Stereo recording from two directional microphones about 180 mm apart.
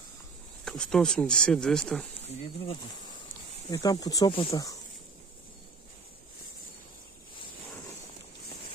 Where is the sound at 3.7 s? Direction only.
20° left (ahead or behind).